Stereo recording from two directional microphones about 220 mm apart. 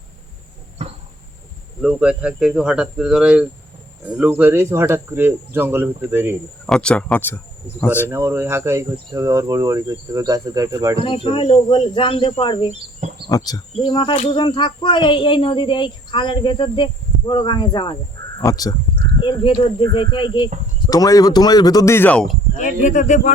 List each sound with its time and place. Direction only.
0.8 s a sound: 30° right (ahead or behind)
1.8 s speech: 5° right (ahead or behind)
6.7 s speech: 5° left (ahead or behind)
8.1 s speech: 10° right (ahead or behind)
11.0 s speech: 25° left (ahead or behind); by 22.4 s 5° left (ahead or behind)
22.5 s speech: 35° left (ahead or behind)